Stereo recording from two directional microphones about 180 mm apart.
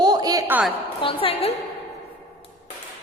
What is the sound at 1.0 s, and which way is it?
Speech, 30° left (ahead or behind).